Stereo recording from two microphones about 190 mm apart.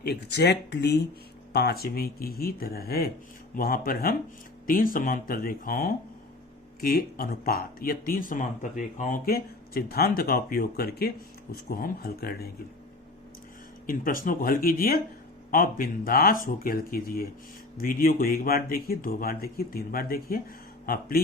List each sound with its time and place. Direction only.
0.0 s speech: 60° left (ahead or behind)
13.8 s speech: 50° left (ahead or behind)